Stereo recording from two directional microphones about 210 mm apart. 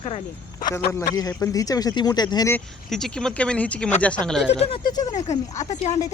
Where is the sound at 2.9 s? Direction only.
Centre (ahead or behind).